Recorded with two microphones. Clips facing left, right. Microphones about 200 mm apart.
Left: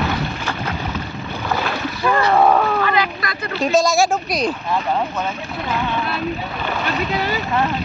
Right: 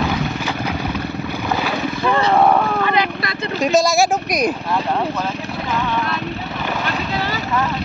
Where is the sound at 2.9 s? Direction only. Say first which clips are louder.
Right 1 dB; 25° right (ahead or behind).